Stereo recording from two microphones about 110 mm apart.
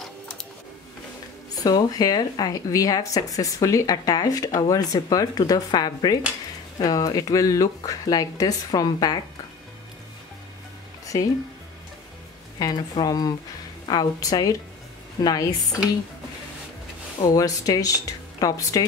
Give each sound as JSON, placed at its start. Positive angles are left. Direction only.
{"t": 1.5, "sound": "speech", "side_deg": 35}
{"t": 12.5, "sound": "a woman's voice", "side_deg": 35}
{"t": 17.2, "sound": "speech", "side_deg": 30}